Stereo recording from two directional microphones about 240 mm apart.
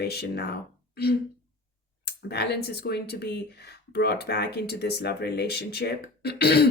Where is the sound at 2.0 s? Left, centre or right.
Left.